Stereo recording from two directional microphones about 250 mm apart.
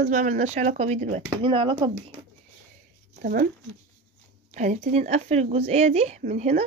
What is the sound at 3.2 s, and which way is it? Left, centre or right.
Speech, right.